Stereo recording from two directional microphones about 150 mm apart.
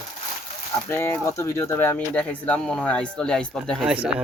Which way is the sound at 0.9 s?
15° left (ahead or behind).